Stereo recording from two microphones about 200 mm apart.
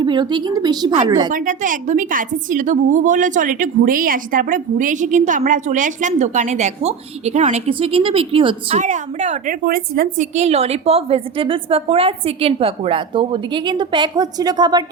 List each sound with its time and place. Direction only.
0.0 s a woman's voice: 25° right (ahead or behind)
1.3 s a woman's voice: 40° right (ahead or behind)
10.3 s a woman's voice: 35° right (ahead or behind)